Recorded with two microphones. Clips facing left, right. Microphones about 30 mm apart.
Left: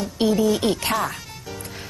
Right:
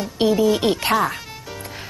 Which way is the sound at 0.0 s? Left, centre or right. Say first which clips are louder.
Right 2 dB; centre.